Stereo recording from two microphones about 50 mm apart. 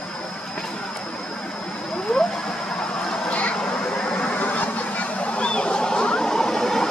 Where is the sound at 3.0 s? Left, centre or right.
Left.